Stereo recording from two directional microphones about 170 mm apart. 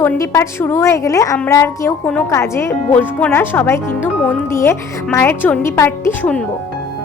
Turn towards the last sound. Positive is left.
turn(degrees=5)  # may be behind; listen again after turning